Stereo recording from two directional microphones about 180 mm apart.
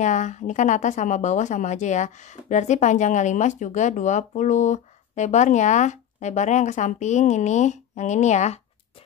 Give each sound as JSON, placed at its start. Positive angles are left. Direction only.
{"t": 0.0, "sound": "speech", "side_deg": 40}